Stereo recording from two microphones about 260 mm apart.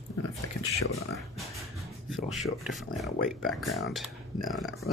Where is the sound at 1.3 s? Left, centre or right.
Centre.